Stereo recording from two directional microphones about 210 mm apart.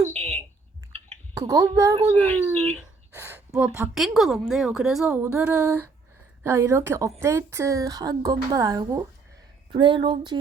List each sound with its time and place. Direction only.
0.1 s a sound: 30° right (ahead or behind)
1.5 s a woman's voice: 15° right (ahead or behind)
2.0 s speech: 30° right (ahead or behind)
2.7 s gasp: 10° right (ahead or behind)
3.8 s a woman's voice: centre (ahead or behind); by 10.3 s 20° right (ahead or behind)